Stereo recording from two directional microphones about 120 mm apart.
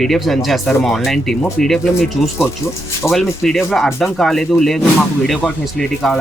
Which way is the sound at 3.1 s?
Centre (ahead or behind).